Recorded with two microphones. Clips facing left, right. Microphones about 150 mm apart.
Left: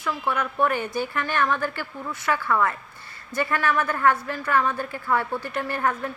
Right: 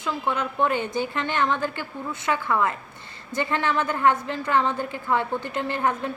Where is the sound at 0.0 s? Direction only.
25° right (ahead or behind).